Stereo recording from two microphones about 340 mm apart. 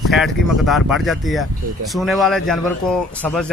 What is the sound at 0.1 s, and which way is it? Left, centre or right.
Speech, centre.